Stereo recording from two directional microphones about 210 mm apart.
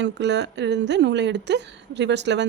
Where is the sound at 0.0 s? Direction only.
55° right (ahead or behind).